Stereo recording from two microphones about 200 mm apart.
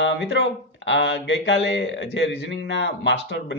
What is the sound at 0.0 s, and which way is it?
Speech, 60° left (ahead or behind).